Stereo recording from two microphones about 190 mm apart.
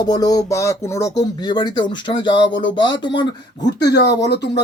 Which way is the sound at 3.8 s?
60° left (ahead or behind).